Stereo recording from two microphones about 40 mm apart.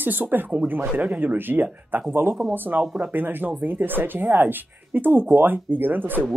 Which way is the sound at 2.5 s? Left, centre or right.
Right.